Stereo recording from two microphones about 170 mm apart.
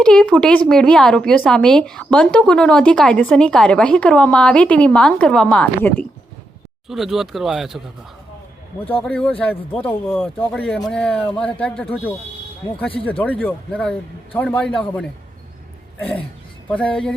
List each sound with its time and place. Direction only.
0.0 s a woman's voice: 5° left (ahead or behind)
8.8 s a man's voice: 35° left (ahead or behind)
9.0 s a woman's voice: 5° left (ahead or behind)
13.1 s speech: 10° left (ahead or behind)
16.6 s a woman's voice: 5° left (ahead or behind)